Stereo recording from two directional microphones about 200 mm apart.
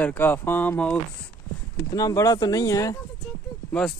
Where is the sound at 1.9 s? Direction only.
20° left (ahead or behind).